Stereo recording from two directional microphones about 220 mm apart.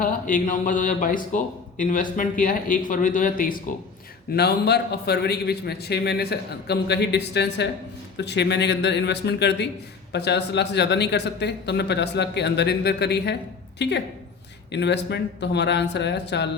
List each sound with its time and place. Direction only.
0.0 s speech: 40° left (ahead or behind)
4.4 s speech: 50° left (ahead or behind)